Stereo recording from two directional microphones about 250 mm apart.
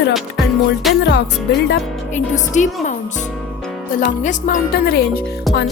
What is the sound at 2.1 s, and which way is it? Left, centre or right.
Speech, left.